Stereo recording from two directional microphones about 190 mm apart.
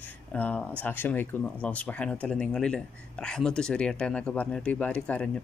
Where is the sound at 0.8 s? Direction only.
10° left (ahead or behind).